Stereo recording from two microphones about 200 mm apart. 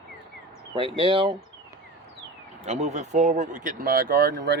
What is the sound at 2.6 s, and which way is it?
Speech, 35° right (ahead or behind).